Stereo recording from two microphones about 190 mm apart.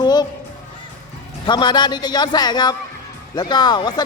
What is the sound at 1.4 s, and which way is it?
A child's voice, 25° left (ahead or behind).